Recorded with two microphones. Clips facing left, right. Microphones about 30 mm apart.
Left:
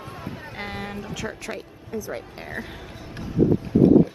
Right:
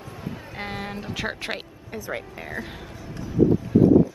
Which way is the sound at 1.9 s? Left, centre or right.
Right.